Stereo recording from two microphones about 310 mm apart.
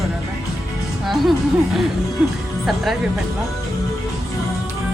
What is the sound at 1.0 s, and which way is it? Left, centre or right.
Speech, centre.